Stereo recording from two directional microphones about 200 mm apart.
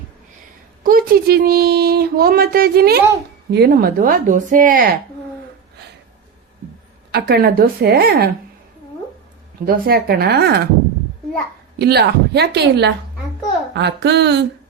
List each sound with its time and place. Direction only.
0.9 s speech: 45° right (ahead or behind)
7.1 s speech: 50° right (ahead or behind)
9.6 s speech: 50° right (ahead or behind)
11.8 s speech: 55° right (ahead or behind)